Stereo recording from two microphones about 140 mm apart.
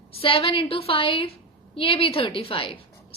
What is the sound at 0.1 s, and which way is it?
A woman's voice, 40° left (ahead or behind).